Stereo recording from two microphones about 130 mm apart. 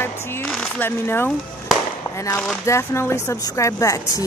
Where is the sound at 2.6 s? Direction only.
20° left (ahead or behind).